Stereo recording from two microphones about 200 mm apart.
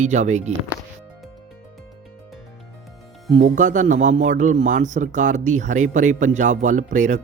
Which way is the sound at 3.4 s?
40° right (ahead or behind).